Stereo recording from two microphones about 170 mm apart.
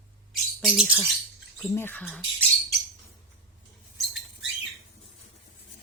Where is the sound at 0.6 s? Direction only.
Centre (ahead or behind).